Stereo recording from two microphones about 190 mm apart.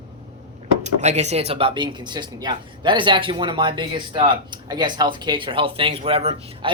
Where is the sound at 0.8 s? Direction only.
35° right (ahead or behind).